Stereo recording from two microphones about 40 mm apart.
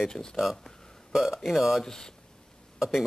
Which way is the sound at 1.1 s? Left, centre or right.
Centre.